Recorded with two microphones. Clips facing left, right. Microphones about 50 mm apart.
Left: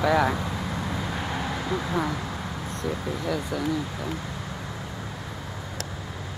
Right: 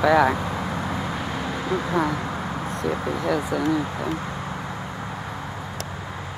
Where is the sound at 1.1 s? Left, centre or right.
Centre.